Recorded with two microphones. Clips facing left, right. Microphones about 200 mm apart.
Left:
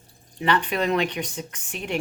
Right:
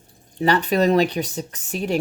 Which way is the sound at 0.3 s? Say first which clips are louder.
Right 5 dB; 40° right (ahead or behind).